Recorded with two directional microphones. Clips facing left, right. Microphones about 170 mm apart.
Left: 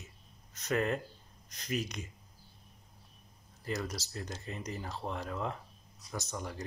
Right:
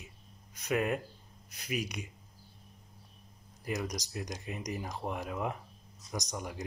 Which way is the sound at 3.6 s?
15° right (ahead or behind).